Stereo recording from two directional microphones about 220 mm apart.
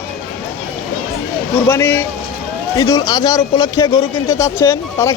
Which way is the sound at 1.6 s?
10° left (ahead or behind).